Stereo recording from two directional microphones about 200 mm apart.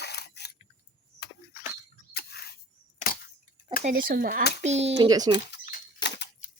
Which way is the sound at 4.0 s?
50° right (ahead or behind).